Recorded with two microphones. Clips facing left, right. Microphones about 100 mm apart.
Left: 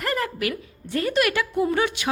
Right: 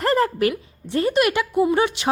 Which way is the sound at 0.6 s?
25° right (ahead or behind).